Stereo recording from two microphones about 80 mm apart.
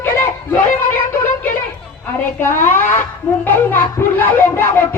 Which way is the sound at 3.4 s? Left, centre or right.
Left.